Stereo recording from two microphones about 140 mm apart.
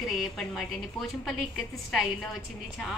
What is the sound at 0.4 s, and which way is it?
Speech, centre (ahead or behind).